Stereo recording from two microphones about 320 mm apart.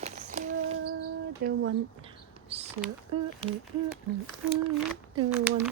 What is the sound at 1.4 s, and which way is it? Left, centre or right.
Speech, right.